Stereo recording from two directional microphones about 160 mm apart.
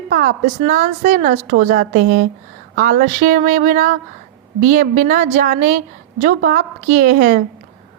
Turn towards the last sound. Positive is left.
turn(degrees=-60)  # may be behind; listen again after turning